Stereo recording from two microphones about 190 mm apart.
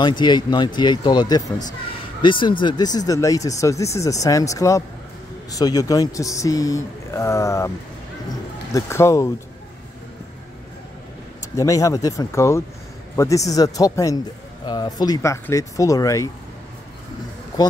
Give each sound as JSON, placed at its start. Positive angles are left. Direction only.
{"t": 0.0, "sound": "speech", "side_deg": 25}
{"t": 8.7, "sound": "speech", "side_deg": 15}
{"t": 11.5, "sound": "speech", "side_deg": 15}